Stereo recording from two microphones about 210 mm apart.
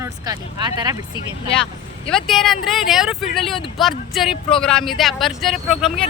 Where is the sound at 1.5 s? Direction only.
5° left (ahead or behind).